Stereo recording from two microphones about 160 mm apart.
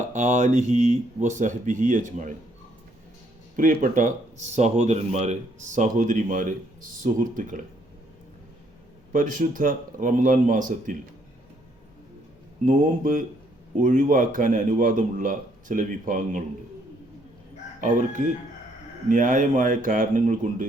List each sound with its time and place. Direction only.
0.1 s speech: 50° right (ahead or behind)
3.6 s speech: 55° right (ahead or behind)
9.1 s speech: 55° right (ahead or behind)
12.6 s speech: 55° right (ahead or behind)
17.7 s speech: 55° right (ahead or behind)